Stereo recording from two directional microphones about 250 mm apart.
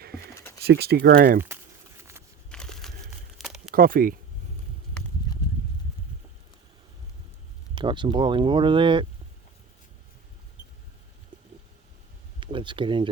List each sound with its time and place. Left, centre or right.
0.6 s speech: right
2.5 s crushing: centre
3.3 s crumpling: centre
3.7 s speech: right
7.8 s speech: centre
12.4 s a sound: centre